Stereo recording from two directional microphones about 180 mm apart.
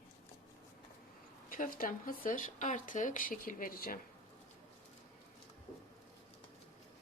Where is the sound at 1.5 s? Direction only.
50° left (ahead or behind).